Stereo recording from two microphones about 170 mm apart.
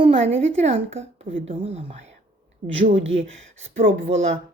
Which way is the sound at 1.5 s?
35° right (ahead or behind).